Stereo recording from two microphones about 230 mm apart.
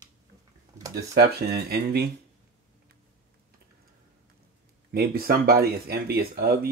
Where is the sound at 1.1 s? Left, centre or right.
Right.